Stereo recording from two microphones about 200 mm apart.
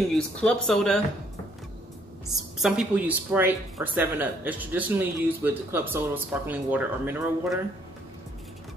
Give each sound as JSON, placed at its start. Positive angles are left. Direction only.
{"t": 0.1, "sound": "speech", "side_deg": 5}
{"t": 2.6, "sound": "speech", "side_deg": -5}